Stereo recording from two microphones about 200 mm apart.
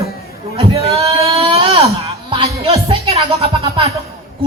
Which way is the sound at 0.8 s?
30° right (ahead or behind).